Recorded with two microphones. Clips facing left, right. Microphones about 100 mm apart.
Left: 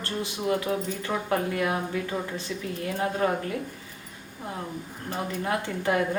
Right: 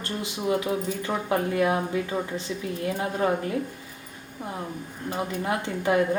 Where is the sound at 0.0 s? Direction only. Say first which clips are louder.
Even; 15° right (ahead or behind).